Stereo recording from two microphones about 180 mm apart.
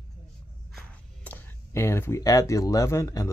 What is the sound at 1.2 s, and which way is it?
Speech, 10° left (ahead or behind).